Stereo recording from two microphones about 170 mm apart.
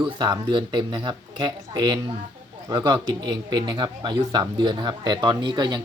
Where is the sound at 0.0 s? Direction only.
25° right (ahead or behind).